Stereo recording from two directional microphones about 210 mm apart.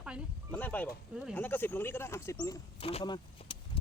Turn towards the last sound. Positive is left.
turn(degrees=25)  # may be behind; listen again after turning